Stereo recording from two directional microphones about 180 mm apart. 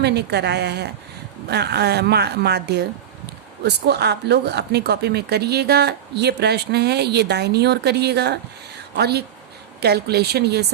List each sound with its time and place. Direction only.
0.0 s speech: 65° right (ahead or behind)